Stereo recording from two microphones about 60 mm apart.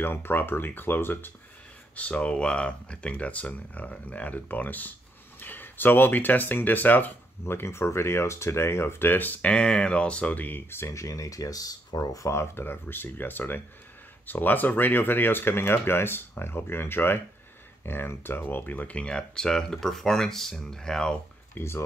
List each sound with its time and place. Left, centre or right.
0.0 s speech: left
2.0 s speech: left
10.9 s speech: left; by 21.2 s centre
21.5 s speech: left